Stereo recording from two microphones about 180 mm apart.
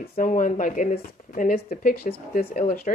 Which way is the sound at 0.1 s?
45° left (ahead or behind).